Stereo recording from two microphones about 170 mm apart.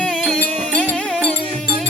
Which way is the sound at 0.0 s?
5° left (ahead or behind).